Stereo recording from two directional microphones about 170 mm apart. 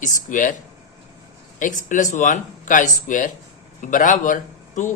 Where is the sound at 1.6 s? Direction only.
50° left (ahead or behind).